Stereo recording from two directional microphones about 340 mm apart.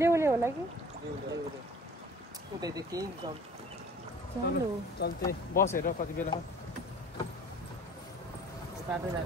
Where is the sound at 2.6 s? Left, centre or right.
Centre.